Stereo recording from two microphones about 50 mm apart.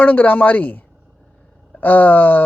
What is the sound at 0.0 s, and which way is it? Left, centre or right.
Speech, left.